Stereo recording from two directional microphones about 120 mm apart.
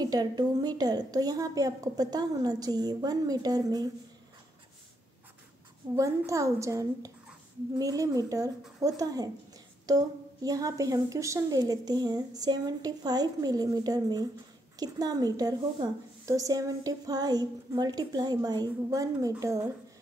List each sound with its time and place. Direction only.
0.0 s a woman's voice: 35° right (ahead or behind)
5.9 s a woman's voice: 25° right (ahead or behind)